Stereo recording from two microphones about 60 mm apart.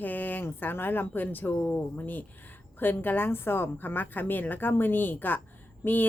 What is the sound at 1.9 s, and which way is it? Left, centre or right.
Speech, left.